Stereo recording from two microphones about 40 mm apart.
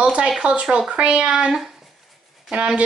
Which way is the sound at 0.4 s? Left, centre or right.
Right.